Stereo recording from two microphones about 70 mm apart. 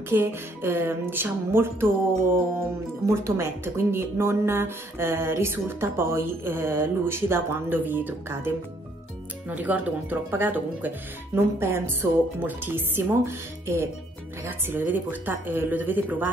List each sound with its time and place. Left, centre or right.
0.1 s speech: right
3.1 s speech: right
11.3 s speech: right